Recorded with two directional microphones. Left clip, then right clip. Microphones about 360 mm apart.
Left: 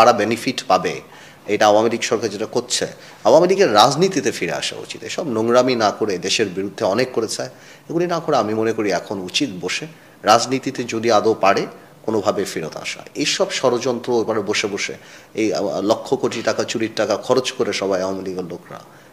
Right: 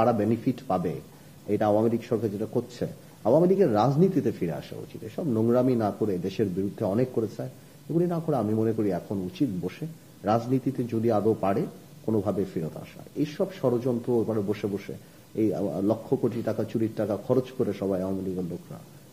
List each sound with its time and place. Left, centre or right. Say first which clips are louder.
0.0 s a man's voice: left 10 dB; centre
15.5 s a man's voice: left 9 dB; centre